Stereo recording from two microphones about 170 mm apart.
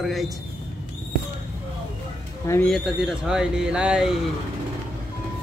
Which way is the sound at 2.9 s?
5° right (ahead or behind).